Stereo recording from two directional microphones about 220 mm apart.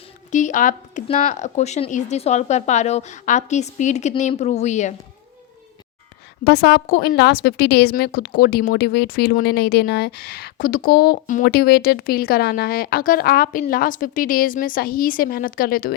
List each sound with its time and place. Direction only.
0.3 s a woman's voice: 35° left (ahead or behind)
6.4 s a woman's voice: 45° left (ahead or behind)